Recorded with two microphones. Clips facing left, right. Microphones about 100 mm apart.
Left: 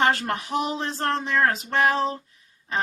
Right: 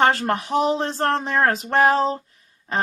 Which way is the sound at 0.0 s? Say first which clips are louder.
Right 4 dB; 35° right (ahead or behind).